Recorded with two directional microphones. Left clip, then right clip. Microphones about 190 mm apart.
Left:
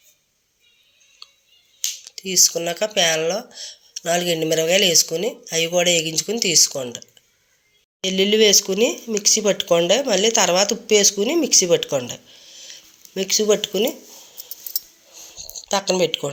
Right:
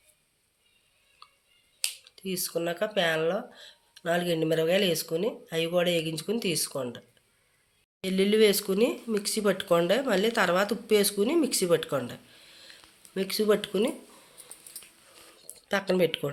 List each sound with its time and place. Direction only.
1.2 s a sound: centre (ahead or behind)
2.0 s speech: 5° left (ahead or behind)
8.0 s speech: 10° left (ahead or behind)
15.4 s speech: 5° right (ahead or behind)